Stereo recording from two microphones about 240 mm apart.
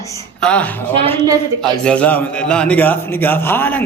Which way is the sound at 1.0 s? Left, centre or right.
Right.